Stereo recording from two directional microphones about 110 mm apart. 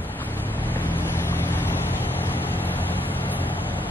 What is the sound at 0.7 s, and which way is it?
Boat, 15° left (ahead or behind).